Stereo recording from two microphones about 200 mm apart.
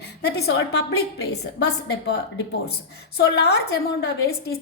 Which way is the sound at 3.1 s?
55° left (ahead or behind).